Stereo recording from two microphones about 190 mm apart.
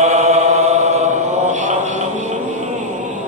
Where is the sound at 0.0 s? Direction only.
35° right (ahead or behind).